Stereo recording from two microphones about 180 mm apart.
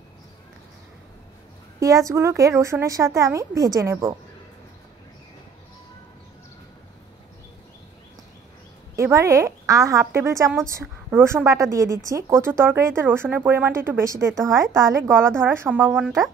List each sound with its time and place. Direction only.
1.8 s speech: 20° right (ahead or behind)
8.9 s speech: 15° right (ahead or behind)